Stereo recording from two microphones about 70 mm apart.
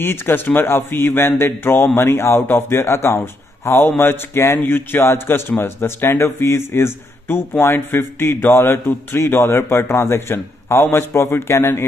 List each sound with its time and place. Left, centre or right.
0.0 s a man's voice: left